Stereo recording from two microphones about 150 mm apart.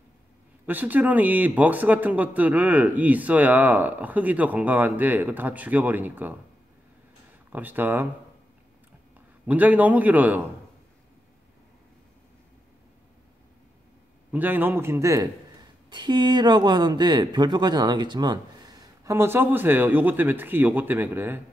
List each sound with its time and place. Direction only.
0.7 s speech: 10° right (ahead or behind)
7.5 s speech: 10° right (ahead or behind)
9.5 s speech: 10° right (ahead or behind)
14.3 s speech: 10° right (ahead or behind)
15.9 s speech: 30° right (ahead or behind); by 21.4 s 15° right (ahead or behind)